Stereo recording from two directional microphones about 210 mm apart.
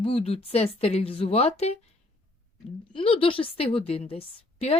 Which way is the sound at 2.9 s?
25° left (ahead or behind).